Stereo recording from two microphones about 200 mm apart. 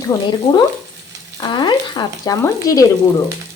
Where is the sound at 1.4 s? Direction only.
20° left (ahead or behind).